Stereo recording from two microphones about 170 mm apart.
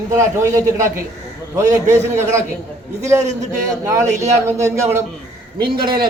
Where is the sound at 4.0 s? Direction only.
45° right (ahead or behind).